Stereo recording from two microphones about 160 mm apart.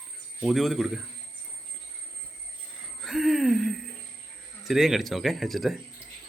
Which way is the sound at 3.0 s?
Centre (ahead or behind).